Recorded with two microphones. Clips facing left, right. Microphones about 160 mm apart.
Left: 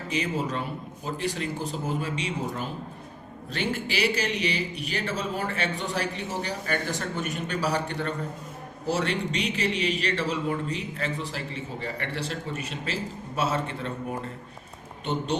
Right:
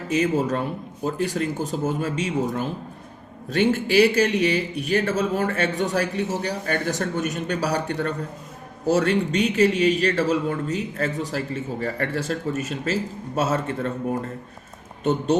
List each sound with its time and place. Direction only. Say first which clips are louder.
0.1 s a man's voice: right 7 dB; 45° right (ahead or behind)